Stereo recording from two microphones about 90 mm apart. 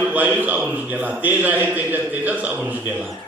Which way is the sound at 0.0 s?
15° right (ahead or behind).